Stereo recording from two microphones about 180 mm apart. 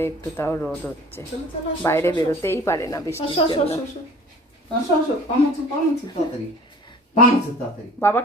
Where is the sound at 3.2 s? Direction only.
30° left (ahead or behind).